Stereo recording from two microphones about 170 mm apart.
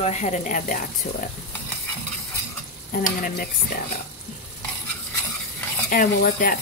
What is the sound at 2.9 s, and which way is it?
Stir, 55° left (ahead or behind).